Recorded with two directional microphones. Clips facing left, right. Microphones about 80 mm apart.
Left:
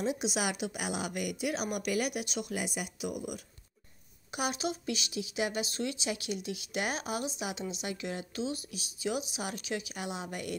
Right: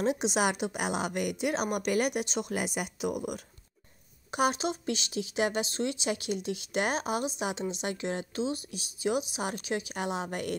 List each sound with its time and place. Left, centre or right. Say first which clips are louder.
0.0 s speech: right 5 dB; right
4.3 s speech: right 5 dB; right
8.4 s speech: right 3 dB; right